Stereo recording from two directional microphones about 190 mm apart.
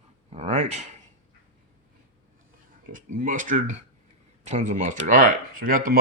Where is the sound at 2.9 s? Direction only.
45° right (ahead or behind).